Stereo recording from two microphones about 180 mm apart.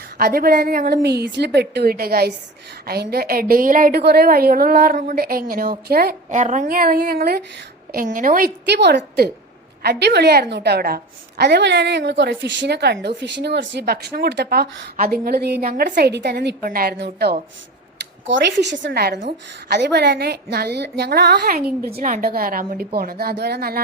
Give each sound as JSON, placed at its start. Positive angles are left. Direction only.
{"t": 0.2, "sound": "a woman's voice", "side_deg": -55}
{"t": 7.9, "sound": "a woman's voice", "side_deg": -50}
{"t": 8.6, "sound": "a woman's voice", "side_deg": -70}
{"t": 12.6, "sound": "a woman's voice", "side_deg": -65}
{"t": 16.6, "sound": "a woman's voice", "side_deg": -55}
{"t": 18.3, "sound": "a woman's voice", "side_deg": -75}